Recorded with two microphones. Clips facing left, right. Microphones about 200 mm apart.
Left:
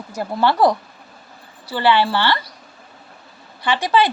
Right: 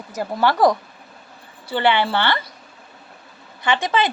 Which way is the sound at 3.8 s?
20° right (ahead or behind).